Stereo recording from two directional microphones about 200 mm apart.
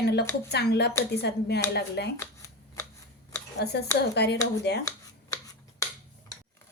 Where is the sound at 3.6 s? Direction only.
55° left (ahead or behind).